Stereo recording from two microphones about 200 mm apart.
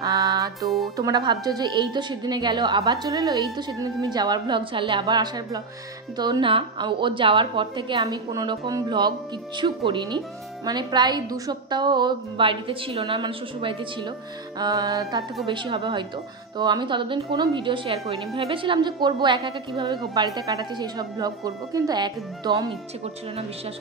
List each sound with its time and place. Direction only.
0.0 s music: 20° right (ahead or behind)
0.7 s speech: centre (ahead or behind)
0.9 s a woman's voice: 20° right (ahead or behind)
14.6 s music: 15° right (ahead or behind)
15.4 s a woman's voice: 25° right (ahead or behind)